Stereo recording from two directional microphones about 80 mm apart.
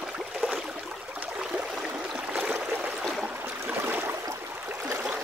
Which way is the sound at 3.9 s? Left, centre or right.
Right.